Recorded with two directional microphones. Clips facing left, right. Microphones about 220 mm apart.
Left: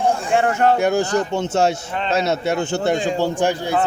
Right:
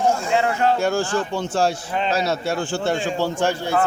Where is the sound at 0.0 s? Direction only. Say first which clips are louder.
Even; 30° left (ahead or behind).